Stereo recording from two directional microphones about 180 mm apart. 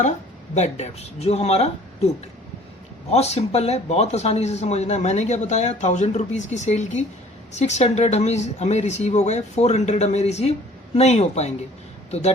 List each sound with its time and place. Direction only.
0.5 s speech: 40° left (ahead or behind)
3.1 s speech: 35° left (ahead or behind)